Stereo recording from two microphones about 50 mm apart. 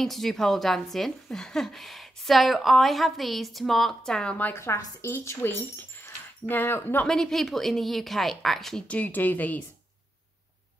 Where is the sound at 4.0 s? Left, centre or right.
Centre.